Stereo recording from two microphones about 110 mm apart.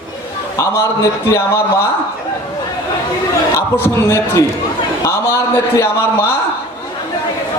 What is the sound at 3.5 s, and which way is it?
A man's voice, 25° left (ahead or behind).